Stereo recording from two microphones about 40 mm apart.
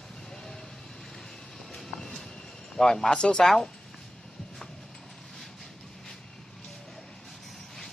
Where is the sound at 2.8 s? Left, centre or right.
Centre.